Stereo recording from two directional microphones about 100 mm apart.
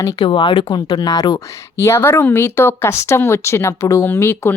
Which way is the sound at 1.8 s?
25° left (ahead or behind).